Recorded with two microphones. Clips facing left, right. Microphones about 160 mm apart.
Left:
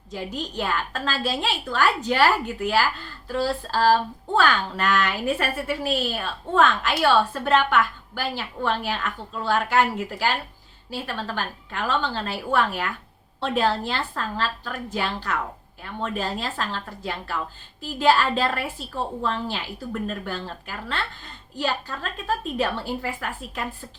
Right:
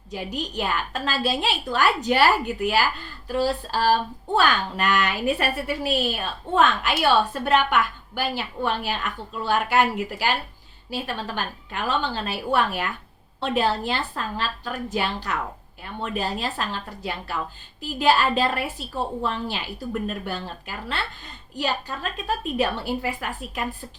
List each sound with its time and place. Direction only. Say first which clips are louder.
0.1 s a woman's voice: right 1 dB; 15° right (ahead or behind)